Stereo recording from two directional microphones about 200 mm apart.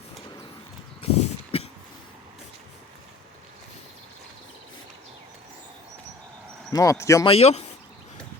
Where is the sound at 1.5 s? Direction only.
30° left (ahead or behind).